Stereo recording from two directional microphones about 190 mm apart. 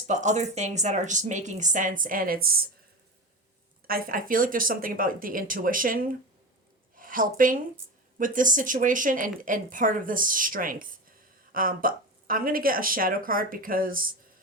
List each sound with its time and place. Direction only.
0.1 s speech: 40° right (ahead or behind)
3.8 s a woman's voice: 50° right (ahead or behind)